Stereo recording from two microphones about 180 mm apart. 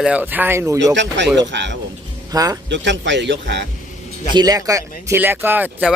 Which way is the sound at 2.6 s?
80° right.